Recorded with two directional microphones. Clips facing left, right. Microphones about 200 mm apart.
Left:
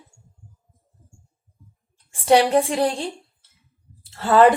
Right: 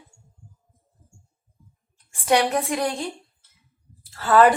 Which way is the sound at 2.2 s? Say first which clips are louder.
Left 5 dB; 30° left (ahead or behind).